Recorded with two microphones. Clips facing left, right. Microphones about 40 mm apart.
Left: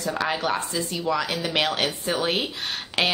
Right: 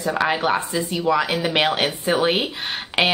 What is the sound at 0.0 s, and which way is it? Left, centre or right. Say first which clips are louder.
Speech: right 5 dB; centre.